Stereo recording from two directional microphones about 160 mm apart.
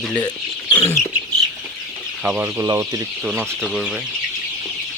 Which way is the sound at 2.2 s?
5° right (ahead or behind).